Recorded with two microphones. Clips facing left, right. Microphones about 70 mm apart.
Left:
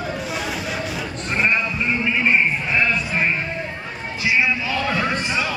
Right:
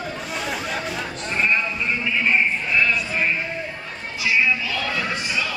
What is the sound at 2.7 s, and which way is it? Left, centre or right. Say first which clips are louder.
Sheep: left 1 dB; left.